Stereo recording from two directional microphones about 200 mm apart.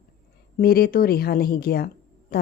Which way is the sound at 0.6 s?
50° left (ahead or behind).